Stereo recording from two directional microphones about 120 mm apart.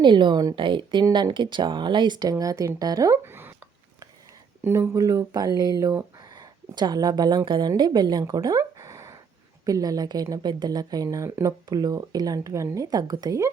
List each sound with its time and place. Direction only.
0.0 s a woman's voice: 40° right (ahead or behind)
4.6 s a woman's voice: 20° right (ahead or behind); by 8.2 s 35° right (ahead or behind)
8.2 s a sound: 30° right (ahead or behind)
9.6 s a woman's voice: 30° right (ahead or behind)